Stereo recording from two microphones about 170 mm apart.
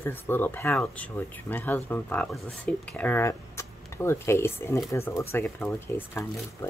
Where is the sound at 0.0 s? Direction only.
10° left (ahead or behind).